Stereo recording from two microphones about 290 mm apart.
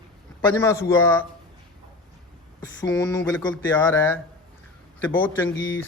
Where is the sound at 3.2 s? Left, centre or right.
Centre.